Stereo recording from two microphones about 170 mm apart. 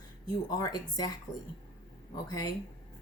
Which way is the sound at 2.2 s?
20° left (ahead or behind).